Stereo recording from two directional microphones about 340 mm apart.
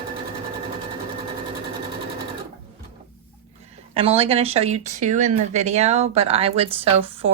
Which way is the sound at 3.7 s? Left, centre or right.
Centre.